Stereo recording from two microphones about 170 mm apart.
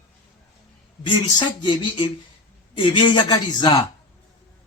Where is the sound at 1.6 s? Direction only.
30° left (ahead or behind).